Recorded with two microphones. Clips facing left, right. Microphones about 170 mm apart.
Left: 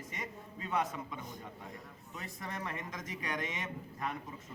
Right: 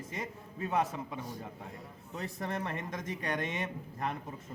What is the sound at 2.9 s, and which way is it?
Speech, 60° right (ahead or behind).